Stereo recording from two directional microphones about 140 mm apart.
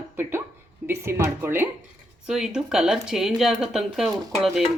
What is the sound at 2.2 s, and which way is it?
Speech, 5° right (ahead or behind).